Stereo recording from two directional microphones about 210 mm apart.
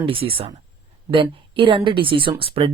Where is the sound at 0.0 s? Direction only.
25° right (ahead or behind).